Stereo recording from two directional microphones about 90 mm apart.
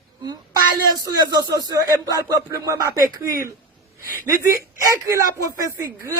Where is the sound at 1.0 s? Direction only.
50° right (ahead or behind).